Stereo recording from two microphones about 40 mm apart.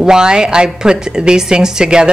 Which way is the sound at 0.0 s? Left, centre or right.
Centre.